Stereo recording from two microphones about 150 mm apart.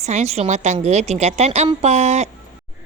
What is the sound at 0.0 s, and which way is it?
Speech, 50° right (ahead or behind).